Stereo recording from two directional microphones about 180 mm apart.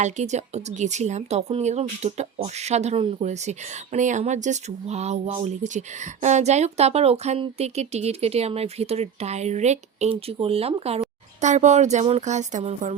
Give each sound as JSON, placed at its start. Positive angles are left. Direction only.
{"t": 0.0, "sound": "speech", "side_deg": -40}